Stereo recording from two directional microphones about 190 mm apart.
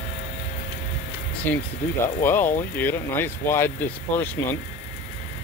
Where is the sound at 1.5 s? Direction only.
10° left (ahead or behind).